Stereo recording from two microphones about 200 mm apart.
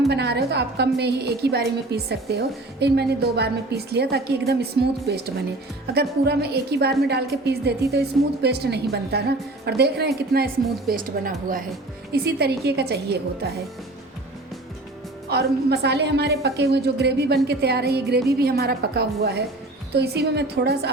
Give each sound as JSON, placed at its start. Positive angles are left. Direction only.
{"t": 0.1, "sound": "a woman's voice", "side_deg": -55}
{"t": 15.3, "sound": "a woman's voice", "side_deg": -55}